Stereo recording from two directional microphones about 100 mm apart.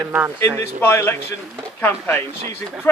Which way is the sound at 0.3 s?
20° left (ahead or behind).